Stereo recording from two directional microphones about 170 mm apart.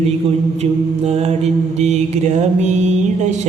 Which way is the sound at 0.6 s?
35° right (ahead or behind).